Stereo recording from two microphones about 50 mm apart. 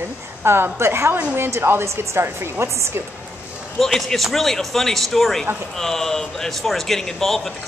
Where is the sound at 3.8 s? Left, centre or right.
Centre.